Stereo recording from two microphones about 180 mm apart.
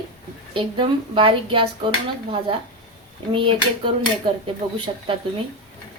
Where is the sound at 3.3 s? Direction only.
25° right (ahead or behind).